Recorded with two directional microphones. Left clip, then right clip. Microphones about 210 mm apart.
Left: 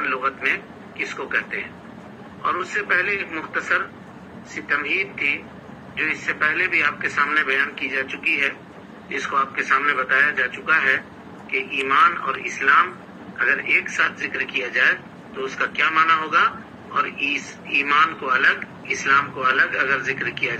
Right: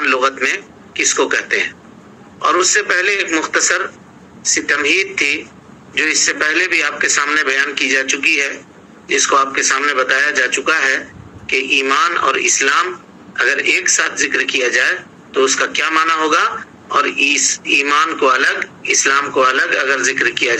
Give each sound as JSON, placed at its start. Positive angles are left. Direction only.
{"t": 0.0, "sound": "a man's voice", "side_deg": -65}